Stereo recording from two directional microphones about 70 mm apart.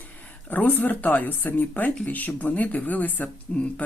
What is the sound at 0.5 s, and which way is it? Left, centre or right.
Speech, left.